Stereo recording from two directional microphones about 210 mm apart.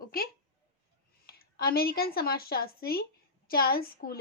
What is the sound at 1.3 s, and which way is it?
A woman's voice, 45° left (ahead or behind).